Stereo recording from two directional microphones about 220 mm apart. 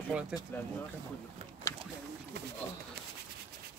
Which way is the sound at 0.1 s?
5° right (ahead or behind).